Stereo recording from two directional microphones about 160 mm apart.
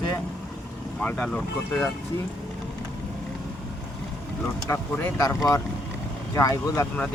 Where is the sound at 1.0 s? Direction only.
10° left (ahead or behind).